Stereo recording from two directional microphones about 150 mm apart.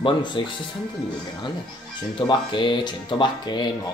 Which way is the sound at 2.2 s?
30° left (ahead or behind).